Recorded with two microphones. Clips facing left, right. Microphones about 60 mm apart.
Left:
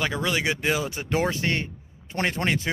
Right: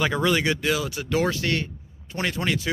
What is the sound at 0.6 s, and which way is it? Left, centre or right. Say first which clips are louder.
Speech: right 1 dB; left.